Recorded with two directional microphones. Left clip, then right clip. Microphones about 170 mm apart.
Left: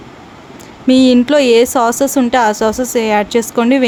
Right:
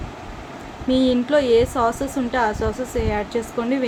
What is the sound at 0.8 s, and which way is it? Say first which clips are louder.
Speech: left 9 dB; 90° left.